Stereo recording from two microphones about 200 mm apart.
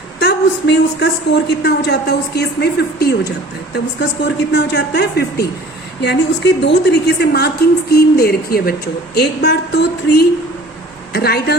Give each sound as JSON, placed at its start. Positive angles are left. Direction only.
{"t": 0.2, "sound": "a woman's voice", "side_deg": 60}